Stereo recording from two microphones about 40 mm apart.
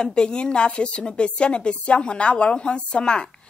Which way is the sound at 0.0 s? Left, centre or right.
Left.